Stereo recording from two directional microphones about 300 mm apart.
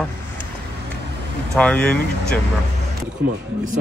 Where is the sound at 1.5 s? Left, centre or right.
Centre.